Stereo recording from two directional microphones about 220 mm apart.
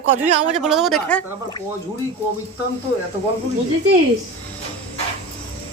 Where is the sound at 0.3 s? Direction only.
30° right (ahead or behind).